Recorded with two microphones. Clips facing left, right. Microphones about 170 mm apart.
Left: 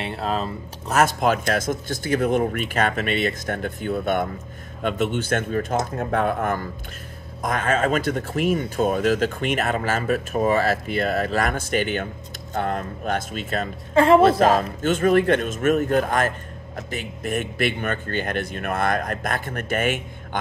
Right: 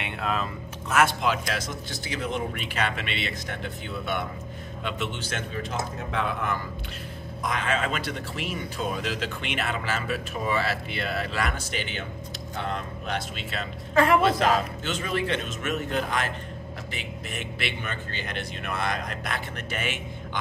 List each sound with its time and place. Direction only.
0.0 s speech: 35° left (ahead or behind)
13.9 s a woman's voice: 25° left (ahead or behind)
14.4 s speech: 50° left (ahead or behind)